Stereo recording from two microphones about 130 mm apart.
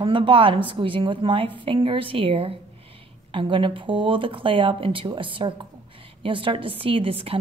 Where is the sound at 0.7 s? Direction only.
40° right (ahead or behind).